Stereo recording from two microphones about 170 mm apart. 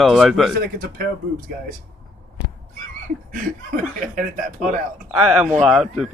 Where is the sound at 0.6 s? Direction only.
55° right (ahead or behind).